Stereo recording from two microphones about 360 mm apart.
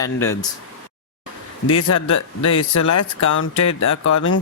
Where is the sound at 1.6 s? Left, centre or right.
Left.